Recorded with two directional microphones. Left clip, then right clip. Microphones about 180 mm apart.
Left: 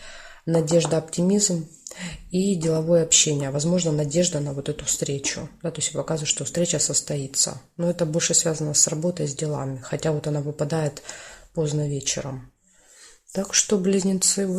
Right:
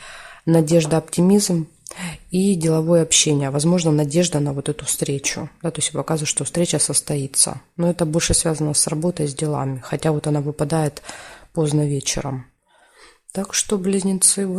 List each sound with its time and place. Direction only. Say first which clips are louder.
0.0 s speech: right 7 dB; 40° right (ahead or behind)
13.3 s speech: even; 25° right (ahead or behind)